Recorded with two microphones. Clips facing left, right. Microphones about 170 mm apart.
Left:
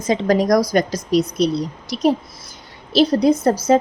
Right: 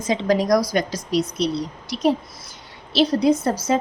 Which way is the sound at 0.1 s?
45° left (ahead or behind).